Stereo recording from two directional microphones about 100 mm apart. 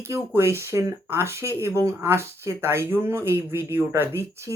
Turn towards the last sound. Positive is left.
turn(degrees=-25)  # may be behind; listen again after turning